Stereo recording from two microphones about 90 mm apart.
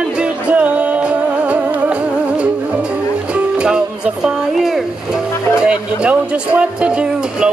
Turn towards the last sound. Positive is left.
turn(degrees=-10)  # may be behind; listen again after turning